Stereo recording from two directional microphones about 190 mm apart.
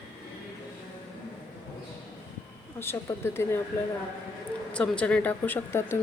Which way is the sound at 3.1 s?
20° left (ahead or behind).